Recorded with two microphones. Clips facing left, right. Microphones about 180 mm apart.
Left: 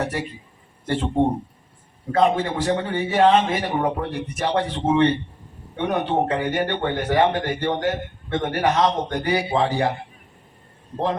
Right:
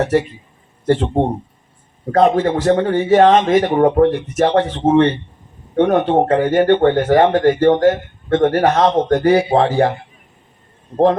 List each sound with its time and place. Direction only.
0.9 s a man's voice: 45° right (ahead or behind)